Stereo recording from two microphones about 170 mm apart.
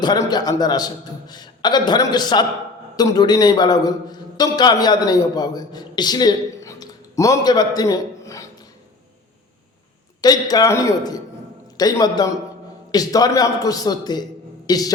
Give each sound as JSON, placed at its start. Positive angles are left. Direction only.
{"t": 0.0, "sound": "a man's voice", "side_deg": 25}
{"t": 10.2, "sound": "a man's voice", "side_deg": 20}